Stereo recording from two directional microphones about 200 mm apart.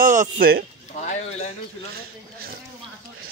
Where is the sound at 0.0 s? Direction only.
40° right (ahead or behind).